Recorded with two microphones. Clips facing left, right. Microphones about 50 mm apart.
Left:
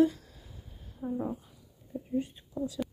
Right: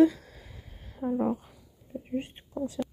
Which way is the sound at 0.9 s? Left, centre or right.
Right.